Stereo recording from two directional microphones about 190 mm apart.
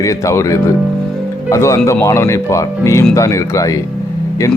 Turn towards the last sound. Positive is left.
turn(degrees=15)  # may be behind; listen again after turning